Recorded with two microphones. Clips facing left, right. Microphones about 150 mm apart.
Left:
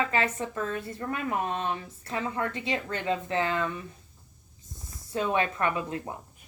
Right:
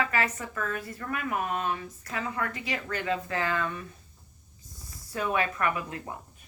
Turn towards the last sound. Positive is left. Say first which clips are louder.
# left 1 dB
turn(degrees=25)  # may be behind; listen again after turning